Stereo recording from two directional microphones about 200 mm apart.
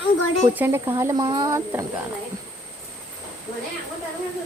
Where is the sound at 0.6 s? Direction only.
10° right (ahead or behind).